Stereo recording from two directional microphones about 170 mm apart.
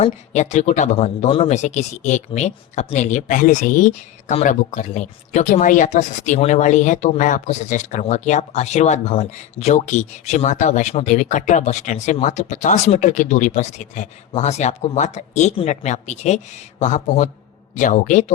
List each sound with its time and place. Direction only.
0.0 s a man's voice: 40° left (ahead or behind)